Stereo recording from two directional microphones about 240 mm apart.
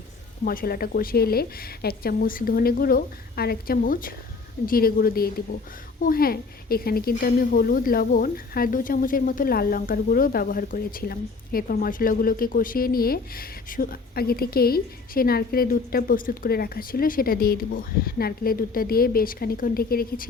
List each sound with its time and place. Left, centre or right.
0.4 s a woman's voice: left